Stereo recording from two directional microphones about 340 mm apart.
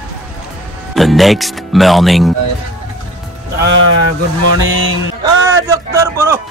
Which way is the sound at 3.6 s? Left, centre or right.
Right.